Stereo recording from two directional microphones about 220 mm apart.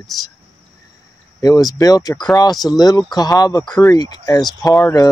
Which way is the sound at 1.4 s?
15° left (ahead or behind).